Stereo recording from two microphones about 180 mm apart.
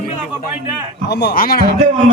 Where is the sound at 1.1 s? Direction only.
65° left (ahead or behind).